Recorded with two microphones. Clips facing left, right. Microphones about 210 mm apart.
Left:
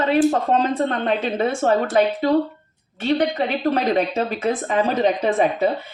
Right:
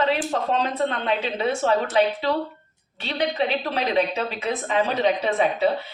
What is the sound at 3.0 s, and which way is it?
A woman's voice, 50° left (ahead or behind).